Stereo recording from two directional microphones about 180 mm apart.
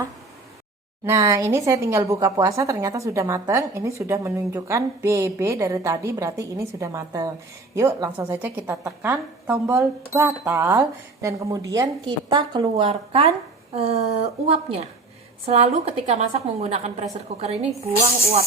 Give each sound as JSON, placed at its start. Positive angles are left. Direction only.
{"t": 1.0, "sound": "a woman's voice", "side_deg": -15}